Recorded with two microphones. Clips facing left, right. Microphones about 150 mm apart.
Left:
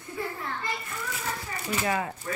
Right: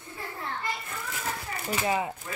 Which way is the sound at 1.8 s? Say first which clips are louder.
Right 1 dB; 20° right (ahead or behind).